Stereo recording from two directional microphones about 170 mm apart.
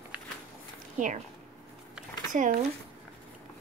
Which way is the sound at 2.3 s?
50° right (ahead or behind).